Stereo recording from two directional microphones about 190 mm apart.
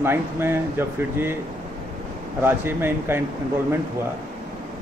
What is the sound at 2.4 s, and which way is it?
Speech, 10° right (ahead or behind).